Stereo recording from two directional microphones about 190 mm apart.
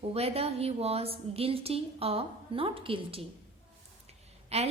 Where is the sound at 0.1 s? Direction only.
30° right (ahead or behind).